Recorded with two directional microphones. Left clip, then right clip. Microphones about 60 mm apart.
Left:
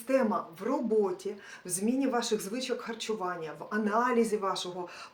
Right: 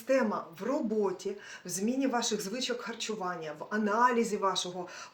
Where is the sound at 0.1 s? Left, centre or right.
Left.